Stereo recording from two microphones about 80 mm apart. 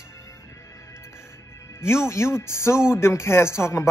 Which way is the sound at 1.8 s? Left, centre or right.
Left.